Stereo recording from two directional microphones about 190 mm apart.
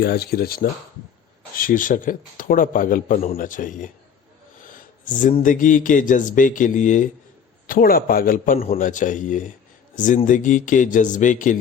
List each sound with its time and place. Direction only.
0.0 s a man's voice: 55° left (ahead or behind)
4.6 s a sound: 45° left (ahead or behind)
5.4 s a man's voice: 45° left (ahead or behind)